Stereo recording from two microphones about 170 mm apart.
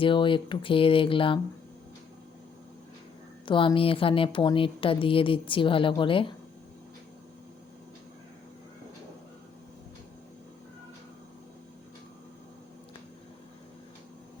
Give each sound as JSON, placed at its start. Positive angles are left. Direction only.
{"t": 0.0, "sound": "speech", "side_deg": 30}
{"t": 3.4, "sound": "speech", "side_deg": 30}